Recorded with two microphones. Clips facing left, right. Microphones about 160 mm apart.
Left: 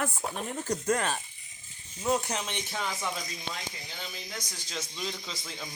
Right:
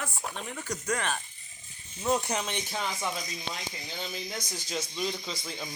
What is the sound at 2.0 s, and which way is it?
Speech, centre (ahead or behind).